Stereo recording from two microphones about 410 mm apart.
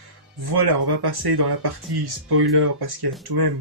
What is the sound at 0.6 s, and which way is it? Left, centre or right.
Speech, right.